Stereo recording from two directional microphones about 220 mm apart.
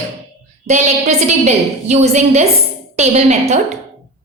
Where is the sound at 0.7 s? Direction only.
30° right (ahead or behind).